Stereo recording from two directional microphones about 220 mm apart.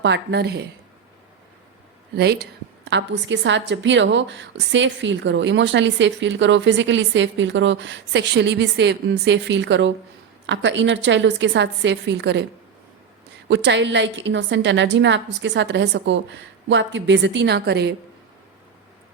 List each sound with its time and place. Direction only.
0.0 s a woman's voice: 55° right (ahead or behind)
2.1 s a woman's voice: 45° right (ahead or behind)
13.5 s a woman's voice: 55° right (ahead or behind)